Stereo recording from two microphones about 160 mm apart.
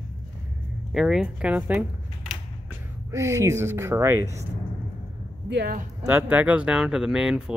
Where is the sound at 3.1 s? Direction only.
20° right (ahead or behind).